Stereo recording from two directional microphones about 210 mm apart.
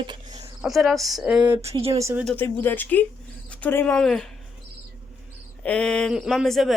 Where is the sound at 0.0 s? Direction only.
20° right (ahead or behind).